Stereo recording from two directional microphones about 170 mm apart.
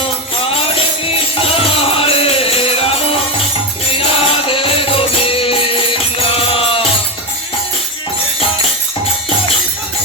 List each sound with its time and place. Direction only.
1.5 s music: 35° left (ahead or behind)